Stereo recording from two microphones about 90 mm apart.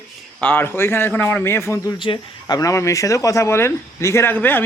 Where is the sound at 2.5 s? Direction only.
35° left (ahead or behind).